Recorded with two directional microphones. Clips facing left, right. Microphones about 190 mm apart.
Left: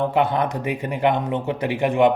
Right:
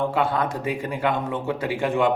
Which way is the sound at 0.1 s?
20° left (ahead or behind).